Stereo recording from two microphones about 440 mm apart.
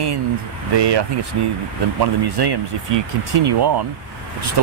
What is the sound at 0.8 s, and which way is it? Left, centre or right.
Speech, right.